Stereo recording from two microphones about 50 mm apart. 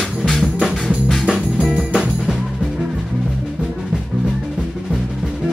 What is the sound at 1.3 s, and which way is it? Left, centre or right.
Music, centre.